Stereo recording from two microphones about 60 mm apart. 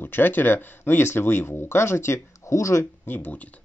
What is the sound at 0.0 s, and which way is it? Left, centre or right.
Speech, left.